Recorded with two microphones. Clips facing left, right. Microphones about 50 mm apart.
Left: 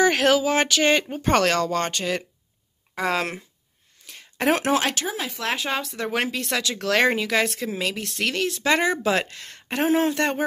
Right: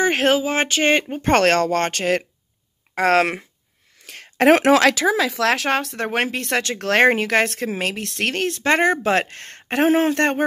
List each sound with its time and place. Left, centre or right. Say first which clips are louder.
0.0 s speech: right 1 dB; right
1.2 s speech: right 5 dB; right